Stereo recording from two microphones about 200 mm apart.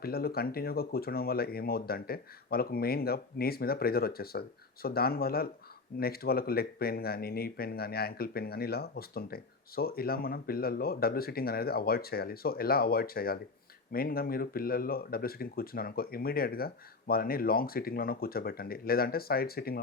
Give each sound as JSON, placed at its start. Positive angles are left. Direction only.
{"t": 0.0, "sound": "speech", "side_deg": 50}